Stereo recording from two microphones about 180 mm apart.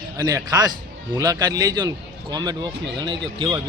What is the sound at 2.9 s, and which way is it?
Speech, 25° right (ahead or behind).